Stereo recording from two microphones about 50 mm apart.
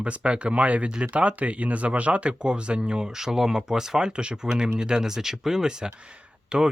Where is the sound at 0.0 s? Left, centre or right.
Right.